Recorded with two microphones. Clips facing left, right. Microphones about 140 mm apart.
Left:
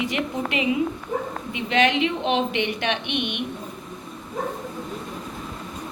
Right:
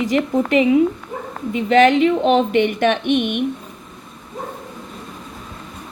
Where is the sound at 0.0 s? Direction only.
40° right (ahead or behind).